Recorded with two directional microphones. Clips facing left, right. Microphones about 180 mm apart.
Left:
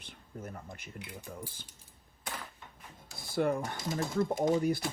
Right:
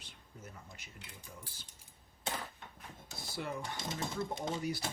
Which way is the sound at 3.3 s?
55° left (ahead or behind).